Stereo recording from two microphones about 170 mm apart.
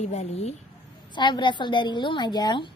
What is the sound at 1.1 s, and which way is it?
A woman's voice, 25° left (ahead or behind).